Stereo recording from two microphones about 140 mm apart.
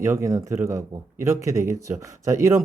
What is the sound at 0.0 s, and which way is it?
Speech, 20° right (ahead or behind).